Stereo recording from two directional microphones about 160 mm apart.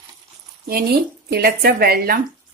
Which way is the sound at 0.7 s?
75° right (ahead or behind).